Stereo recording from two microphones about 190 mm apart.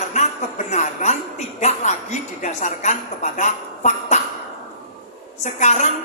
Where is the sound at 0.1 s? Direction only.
35° left (ahead or behind).